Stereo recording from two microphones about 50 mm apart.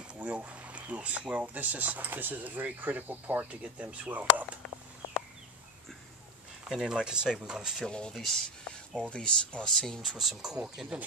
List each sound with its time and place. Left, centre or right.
0.1 s a sound: right
0.5 s speech: right
6.7 s speech: centre
7.8 s speech: centre
8.1 s speech: centre
9.1 s speech: left
9.7 s speech: centre
10.1 s speech: centre